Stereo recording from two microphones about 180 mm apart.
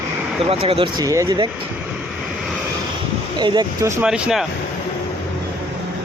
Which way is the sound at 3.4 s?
25° right (ahead or behind).